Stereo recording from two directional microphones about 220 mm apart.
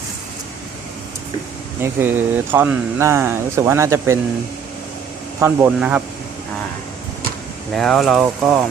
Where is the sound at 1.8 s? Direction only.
10° right (ahead or behind).